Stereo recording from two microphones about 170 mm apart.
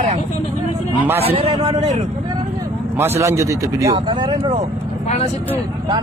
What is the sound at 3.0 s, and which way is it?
Speech, 15° right (ahead or behind).